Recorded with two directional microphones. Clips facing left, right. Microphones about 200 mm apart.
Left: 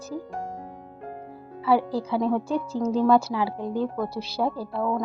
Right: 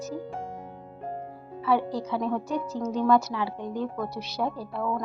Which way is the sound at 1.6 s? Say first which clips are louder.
Left 3 dB; 30° left (ahead or behind).